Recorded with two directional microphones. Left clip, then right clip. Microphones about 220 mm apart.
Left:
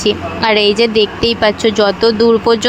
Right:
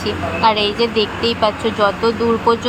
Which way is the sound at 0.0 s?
35° left (ahead or behind).